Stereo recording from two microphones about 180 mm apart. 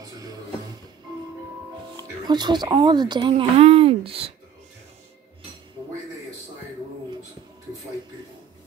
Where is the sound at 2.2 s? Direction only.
25° right (ahead or behind).